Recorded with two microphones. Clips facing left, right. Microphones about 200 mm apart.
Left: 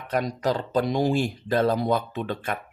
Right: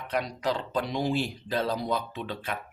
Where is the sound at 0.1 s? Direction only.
45° left (ahead or behind).